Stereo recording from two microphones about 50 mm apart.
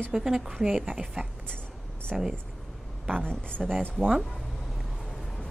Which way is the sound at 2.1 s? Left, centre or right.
Centre.